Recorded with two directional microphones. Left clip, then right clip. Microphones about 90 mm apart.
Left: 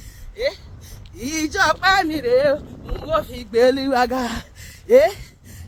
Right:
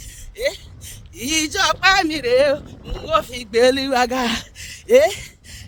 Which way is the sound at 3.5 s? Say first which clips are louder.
Right 1 dB; 50° right (ahead or behind).